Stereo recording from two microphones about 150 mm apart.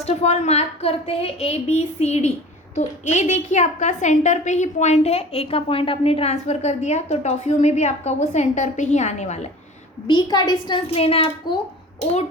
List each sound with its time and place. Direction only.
0.0 s a woman's voice: 50° left (ahead or behind)
10.1 s a woman's voice: 30° left (ahead or behind)